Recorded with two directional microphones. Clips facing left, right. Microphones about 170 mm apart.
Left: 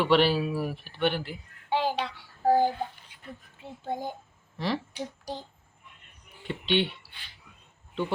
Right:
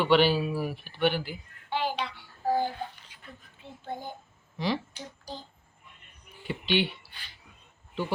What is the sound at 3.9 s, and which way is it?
Speech, 90° left.